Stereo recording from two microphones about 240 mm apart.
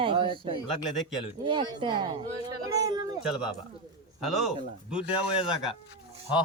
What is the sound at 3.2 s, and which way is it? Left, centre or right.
Speech, centre.